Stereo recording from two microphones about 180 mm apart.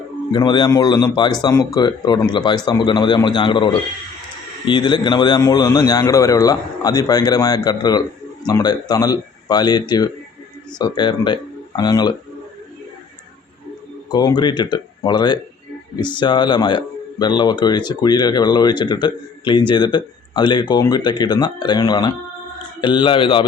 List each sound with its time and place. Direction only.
0.3 s speech: 25° left (ahead or behind)
14.1 s speech: 25° left (ahead or behind)